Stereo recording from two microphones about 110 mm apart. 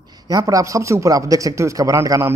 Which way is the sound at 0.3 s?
30° right (ahead or behind).